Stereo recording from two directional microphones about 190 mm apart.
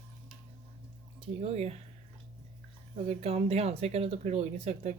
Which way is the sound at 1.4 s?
35° right (ahead or behind).